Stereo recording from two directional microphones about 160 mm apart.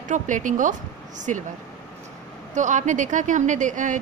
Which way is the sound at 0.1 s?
55° right (ahead or behind).